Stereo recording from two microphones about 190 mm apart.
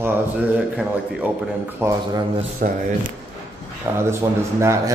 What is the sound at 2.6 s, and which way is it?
Speech, 55° right (ahead or behind).